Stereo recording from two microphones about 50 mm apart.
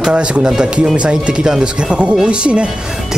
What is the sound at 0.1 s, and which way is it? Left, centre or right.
Speech, centre.